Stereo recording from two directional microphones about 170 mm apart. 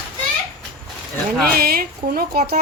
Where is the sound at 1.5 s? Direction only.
60° right (ahead or behind).